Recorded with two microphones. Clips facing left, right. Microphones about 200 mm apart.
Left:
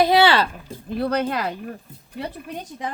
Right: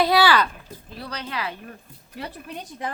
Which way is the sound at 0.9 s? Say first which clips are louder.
Left 13 dB; 55° left (ahead or behind).